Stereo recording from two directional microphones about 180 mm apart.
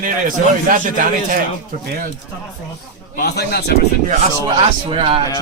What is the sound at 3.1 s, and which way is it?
Speech, 65° left (ahead or behind).